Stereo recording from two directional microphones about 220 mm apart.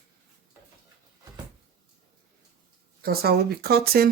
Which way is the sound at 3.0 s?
45° right (ahead or behind).